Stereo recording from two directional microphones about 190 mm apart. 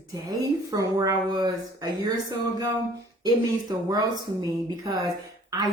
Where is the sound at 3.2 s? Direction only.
20° right (ahead or behind).